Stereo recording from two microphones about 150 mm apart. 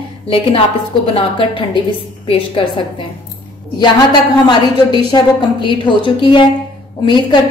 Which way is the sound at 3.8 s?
30° left (ahead or behind).